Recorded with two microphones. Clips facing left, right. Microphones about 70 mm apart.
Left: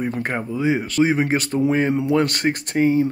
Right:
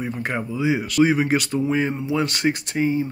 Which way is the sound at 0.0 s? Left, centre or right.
Left.